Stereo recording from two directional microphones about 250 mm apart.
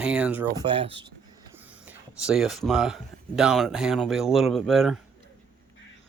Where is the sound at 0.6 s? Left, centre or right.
Right.